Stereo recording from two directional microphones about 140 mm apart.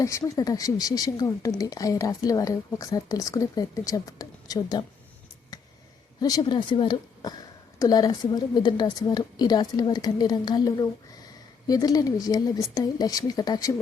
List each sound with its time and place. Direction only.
0.0 s speech: 25° left (ahead or behind)
6.1 s speech: 30° left (ahead or behind)